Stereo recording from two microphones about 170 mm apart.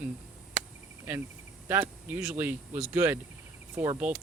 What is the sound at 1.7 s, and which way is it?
Speech, 10° right (ahead or behind).